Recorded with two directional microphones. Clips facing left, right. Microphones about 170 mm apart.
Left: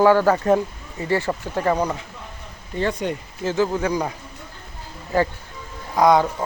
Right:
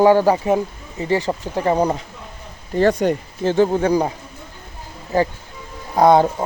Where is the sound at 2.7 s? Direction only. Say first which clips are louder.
Right 7 dB; 40° right (ahead or behind).